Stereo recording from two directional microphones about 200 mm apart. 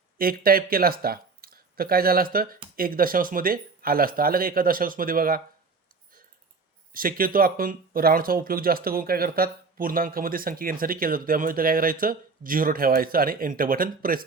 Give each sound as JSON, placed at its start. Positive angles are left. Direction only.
{"t": 0.2, "sound": "speech", "side_deg": -45}
{"t": 6.9, "sound": "speech", "side_deg": -45}